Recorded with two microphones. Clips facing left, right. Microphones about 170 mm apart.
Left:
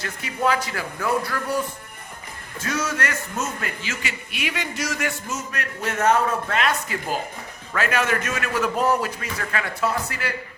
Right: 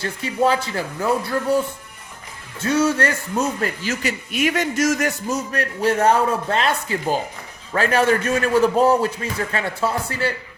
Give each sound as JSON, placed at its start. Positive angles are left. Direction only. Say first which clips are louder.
{"t": 0.0, "sound": "a man's voice", "louder": "right 5 dB", "side_deg": -30}